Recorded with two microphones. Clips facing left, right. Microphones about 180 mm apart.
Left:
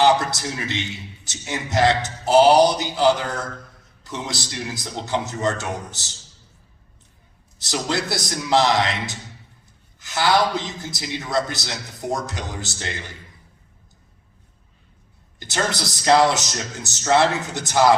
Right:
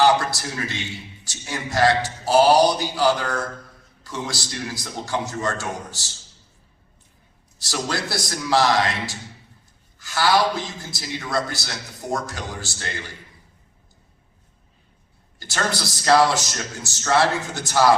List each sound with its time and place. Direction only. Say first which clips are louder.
0.0 s a man's voice: left 1 dB; 20° left (ahead or behind)
7.6 s a man's voice: left 2 dB; 20° left (ahead or behind)
15.4 s a man's voice: left 1 dB; 20° left (ahead or behind)